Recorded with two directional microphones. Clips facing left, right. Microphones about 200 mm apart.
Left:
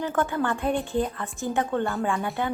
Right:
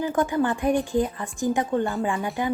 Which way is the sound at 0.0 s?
15° right (ahead or behind).